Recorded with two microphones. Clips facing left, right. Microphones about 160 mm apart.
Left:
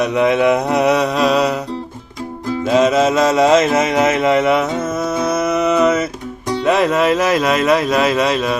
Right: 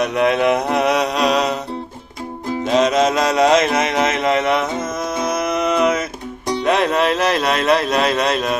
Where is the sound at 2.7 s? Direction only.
5° left (ahead or behind).